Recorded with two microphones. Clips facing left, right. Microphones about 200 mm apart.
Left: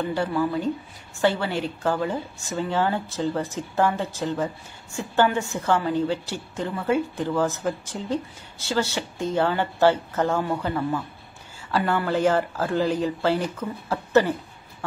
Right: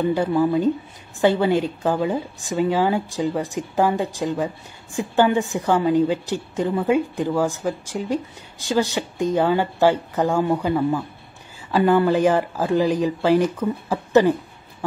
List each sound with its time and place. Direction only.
0.0 s a woman's voice: 15° right (ahead or behind)